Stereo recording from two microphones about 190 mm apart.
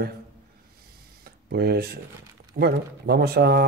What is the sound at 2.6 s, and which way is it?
Speech, 55° right (ahead or behind).